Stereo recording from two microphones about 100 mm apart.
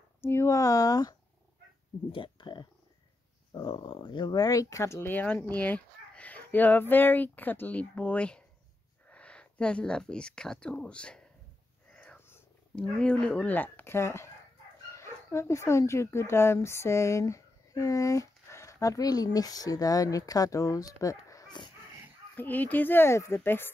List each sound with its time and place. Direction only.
0.2 s speech: 25° left (ahead or behind)
2.1 s speech: 55° left (ahead or behind); by 5.1 s 30° left (ahead or behind)
5.1 s speech: 15° left (ahead or behind)
11.9 s cat: 10° left (ahead or behind)
12.7 s speech: 10° left (ahead or behind); by 21.5 s 35° left (ahead or behind)
21.5 s a sound: 50° left (ahead or behind)
22.3 s a child's voice: 20° left (ahead or behind)